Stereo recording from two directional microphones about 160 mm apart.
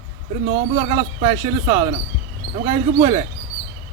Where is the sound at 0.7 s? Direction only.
35° right (ahead or behind).